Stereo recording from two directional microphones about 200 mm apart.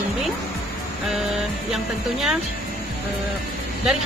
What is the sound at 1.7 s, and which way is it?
Speech, centre (ahead or behind).